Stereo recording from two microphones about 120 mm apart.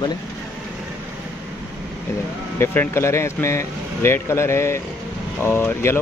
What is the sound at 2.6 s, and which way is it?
Speech, 20° left (ahead or behind).